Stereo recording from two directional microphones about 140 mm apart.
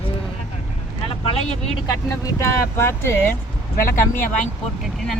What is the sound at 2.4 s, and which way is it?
Speech, 20° left (ahead or behind).